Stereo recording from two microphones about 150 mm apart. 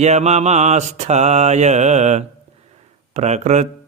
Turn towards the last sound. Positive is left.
turn(degrees=-50)  # may be behind; listen again after turning